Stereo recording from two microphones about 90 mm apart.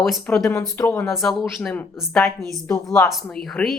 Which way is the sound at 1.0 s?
Centre (ahead or behind).